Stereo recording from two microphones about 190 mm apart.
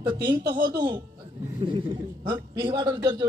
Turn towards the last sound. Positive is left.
turn(degrees=-25)  # may be behind; listen again after turning